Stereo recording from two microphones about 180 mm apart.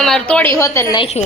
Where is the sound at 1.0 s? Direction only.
35° left (ahead or behind).